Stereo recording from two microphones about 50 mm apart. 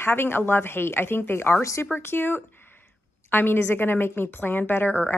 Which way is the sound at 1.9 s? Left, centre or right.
Left.